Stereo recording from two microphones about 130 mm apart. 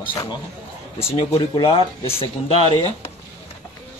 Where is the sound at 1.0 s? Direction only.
20° left (ahead or behind).